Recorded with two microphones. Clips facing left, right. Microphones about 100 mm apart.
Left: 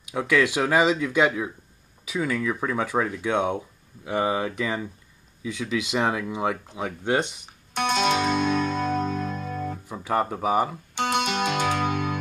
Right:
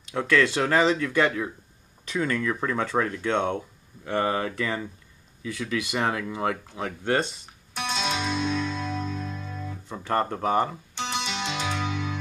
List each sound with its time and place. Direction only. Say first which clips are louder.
0.0 s speech: even; 10° left (ahead or behind)
7.7 s music: left 6 dB; 55° left (ahead or behind)
9.8 s speech: even; 10° left (ahead or behind)
11.0 s music: left 6 dB; 55° left (ahead or behind)